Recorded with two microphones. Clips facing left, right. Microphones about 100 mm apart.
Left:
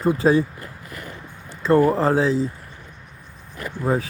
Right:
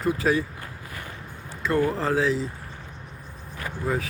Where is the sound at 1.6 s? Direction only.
30° left (ahead or behind).